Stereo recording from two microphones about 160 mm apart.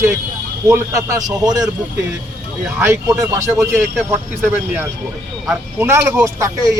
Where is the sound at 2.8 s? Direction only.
15° right (ahead or behind).